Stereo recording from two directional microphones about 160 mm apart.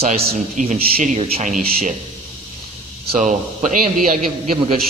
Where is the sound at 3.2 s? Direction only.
55° right (ahead or behind).